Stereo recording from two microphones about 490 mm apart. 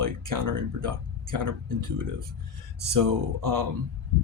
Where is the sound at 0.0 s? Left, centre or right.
Right.